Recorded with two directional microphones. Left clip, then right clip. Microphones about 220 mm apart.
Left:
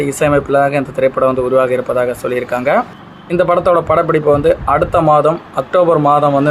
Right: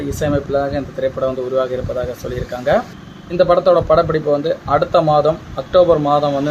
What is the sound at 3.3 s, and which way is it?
Speech, 15° left (ahead or behind).